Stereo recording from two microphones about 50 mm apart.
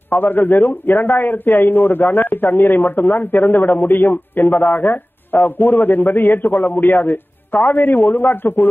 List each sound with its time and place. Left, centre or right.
0.1 s a man's voice: left